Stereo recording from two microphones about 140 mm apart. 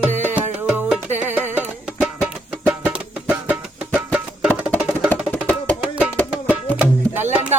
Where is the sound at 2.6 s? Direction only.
10° right (ahead or behind).